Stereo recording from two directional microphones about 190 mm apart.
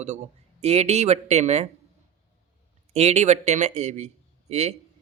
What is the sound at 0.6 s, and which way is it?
A man's voice, 35° right (ahead or behind).